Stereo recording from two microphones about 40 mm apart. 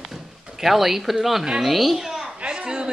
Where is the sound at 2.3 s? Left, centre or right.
Right.